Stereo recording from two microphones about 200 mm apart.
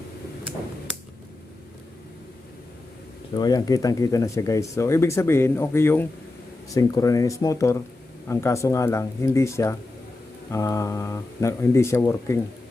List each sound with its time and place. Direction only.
3.3 s speech: 20° left (ahead or behind)